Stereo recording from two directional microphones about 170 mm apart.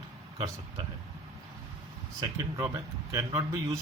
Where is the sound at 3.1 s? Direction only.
20° right (ahead or behind).